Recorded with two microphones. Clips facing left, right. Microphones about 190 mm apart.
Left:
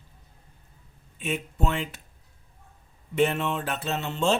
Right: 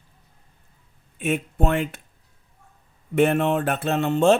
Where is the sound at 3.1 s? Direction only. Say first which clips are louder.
Right 5 dB; 55° right (ahead or behind).